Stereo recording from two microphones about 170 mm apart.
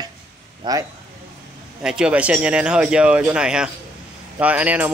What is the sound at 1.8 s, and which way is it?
Speech, 5° right (ahead or behind).